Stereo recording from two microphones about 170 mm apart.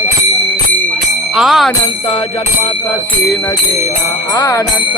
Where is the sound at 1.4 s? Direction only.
Centre (ahead or behind).